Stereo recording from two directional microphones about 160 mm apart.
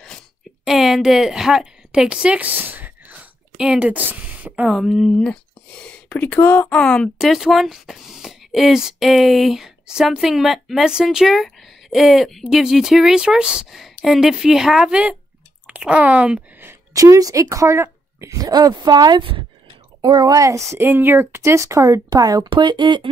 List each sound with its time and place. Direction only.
0.7 s a woman's voice: centre (ahead or behind); by 23.0 s 30° right (ahead or behind)